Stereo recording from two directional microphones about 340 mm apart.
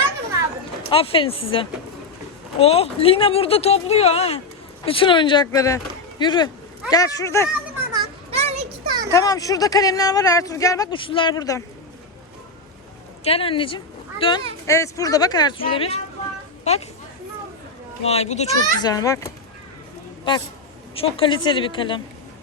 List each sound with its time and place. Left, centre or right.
0.9 s speech: centre
7.9 s children playing: centre
9.1 s speech: centre
13.2 s speech: centre
18.0 s a child's voice: centre